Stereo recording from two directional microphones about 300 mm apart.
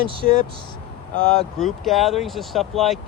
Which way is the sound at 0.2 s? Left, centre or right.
Left.